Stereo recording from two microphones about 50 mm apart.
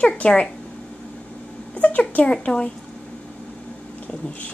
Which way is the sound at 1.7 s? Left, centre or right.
Left.